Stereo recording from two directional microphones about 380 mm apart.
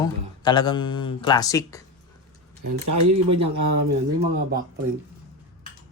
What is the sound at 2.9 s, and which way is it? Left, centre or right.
Speech, right.